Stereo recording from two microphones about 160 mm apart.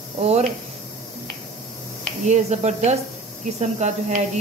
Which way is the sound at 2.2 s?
45° right (ahead or behind).